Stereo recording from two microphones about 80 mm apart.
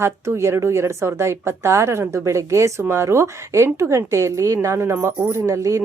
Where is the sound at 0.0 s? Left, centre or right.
Right.